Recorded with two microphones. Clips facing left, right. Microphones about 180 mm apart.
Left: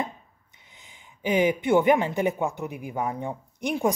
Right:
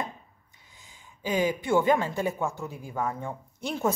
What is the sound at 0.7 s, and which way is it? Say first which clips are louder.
Speech: left 1 dB; 20° left (ahead or behind).